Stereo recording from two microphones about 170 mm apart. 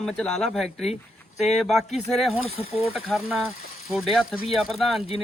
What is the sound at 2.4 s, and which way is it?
Speech, 35° left (ahead or behind).